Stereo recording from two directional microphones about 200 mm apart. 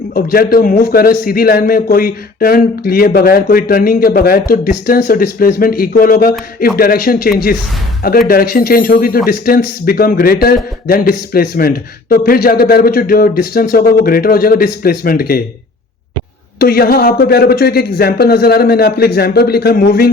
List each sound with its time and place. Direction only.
0.1 s a man's voice: 45° left (ahead or behind)
16.6 s a man's voice: 50° left (ahead or behind)